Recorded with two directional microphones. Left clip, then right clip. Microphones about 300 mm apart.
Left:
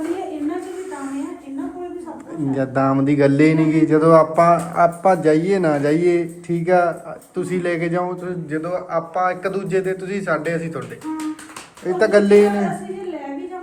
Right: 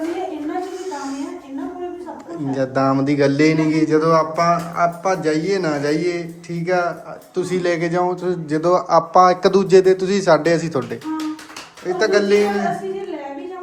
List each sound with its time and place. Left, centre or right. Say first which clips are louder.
2.5 s mantra: right 1 dB; centre
7.3 s a man's voice: right 2 dB; centre
11.9 s mantra: left 2 dB; centre